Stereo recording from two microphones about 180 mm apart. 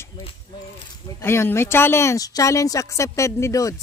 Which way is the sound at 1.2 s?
15° left (ahead or behind).